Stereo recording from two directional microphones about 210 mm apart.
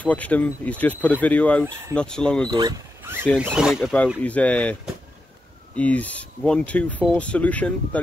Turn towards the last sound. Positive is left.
turn(degrees=5)  # may be behind; listen again after turning